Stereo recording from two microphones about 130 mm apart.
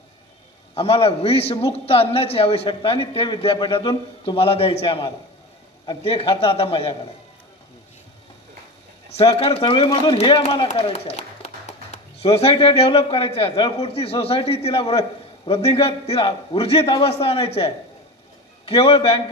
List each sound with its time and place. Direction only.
0.7 s a man's voice: 45° left (ahead or behind)
9.1 s a man's voice: 45° left (ahead or behind)
11.2 s a man's voice: 55° left (ahead or behind)